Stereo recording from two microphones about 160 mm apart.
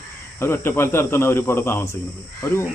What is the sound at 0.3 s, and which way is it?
Speech, 15° left (ahead or behind).